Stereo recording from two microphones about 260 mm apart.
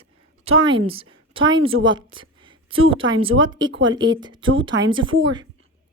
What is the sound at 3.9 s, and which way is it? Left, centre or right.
Speech, centre.